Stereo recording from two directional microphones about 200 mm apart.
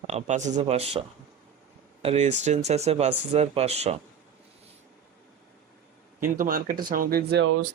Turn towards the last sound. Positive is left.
turn(degrees=-75)  # may be behind; listen again after turning